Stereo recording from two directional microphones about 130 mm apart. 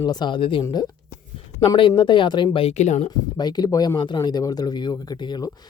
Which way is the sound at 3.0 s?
30° left (ahead or behind).